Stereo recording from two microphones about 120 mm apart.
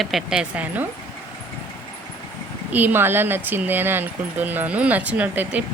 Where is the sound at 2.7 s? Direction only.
15° right (ahead or behind).